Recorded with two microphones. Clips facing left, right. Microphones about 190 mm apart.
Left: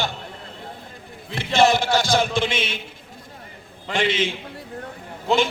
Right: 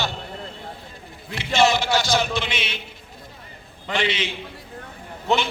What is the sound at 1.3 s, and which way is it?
Speech, 55° left (ahead or behind).